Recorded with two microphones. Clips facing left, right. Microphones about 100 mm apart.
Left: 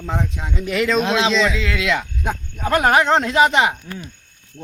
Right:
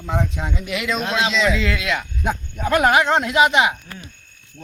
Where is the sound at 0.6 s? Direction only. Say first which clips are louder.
Left 7 dB; 40° left (ahead or behind).